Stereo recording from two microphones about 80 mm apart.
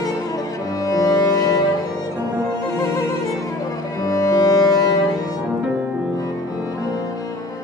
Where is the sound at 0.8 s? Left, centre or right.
Left.